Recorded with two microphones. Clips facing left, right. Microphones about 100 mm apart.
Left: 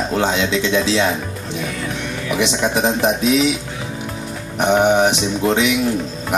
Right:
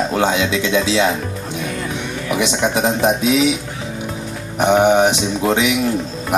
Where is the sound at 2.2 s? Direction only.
20° right (ahead or behind).